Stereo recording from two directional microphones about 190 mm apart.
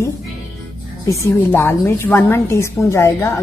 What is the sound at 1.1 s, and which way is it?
A woman's voice, 15° left (ahead or behind).